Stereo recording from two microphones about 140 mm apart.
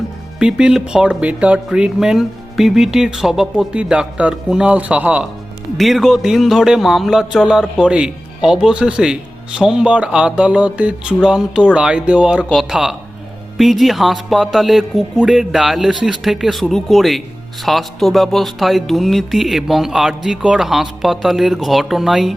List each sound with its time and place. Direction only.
0.3 s speech: 5° right (ahead or behind)